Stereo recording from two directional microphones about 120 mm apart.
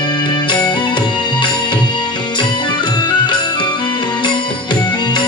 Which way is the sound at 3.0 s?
40° left (ahead or behind).